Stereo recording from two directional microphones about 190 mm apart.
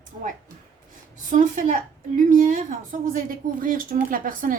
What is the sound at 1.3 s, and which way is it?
A woman's voice, 40° right (ahead or behind).